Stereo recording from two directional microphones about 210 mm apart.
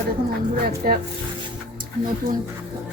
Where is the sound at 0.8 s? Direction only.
45° right (ahead or behind).